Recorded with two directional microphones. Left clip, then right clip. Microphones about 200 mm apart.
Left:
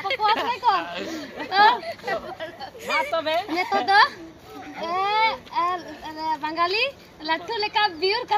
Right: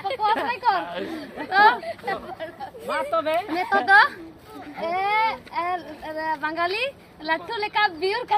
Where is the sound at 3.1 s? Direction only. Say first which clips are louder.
Right 1 dB; 55° right (ahead or behind).